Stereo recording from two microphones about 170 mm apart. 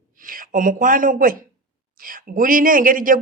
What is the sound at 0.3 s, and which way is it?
A man's voice, 55° right (ahead or behind).